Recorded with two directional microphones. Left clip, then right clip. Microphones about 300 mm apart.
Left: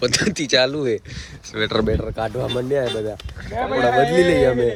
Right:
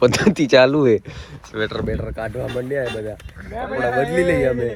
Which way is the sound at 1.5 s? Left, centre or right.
Centre.